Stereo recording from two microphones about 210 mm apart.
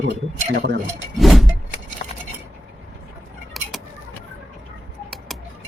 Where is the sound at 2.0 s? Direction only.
35° left (ahead or behind).